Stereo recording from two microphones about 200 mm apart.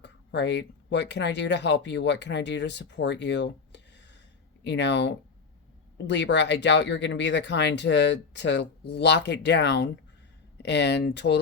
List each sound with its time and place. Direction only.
0.0 s speech: 60° left (ahead or behind)